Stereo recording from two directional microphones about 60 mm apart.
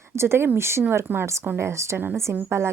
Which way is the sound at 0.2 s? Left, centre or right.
Right.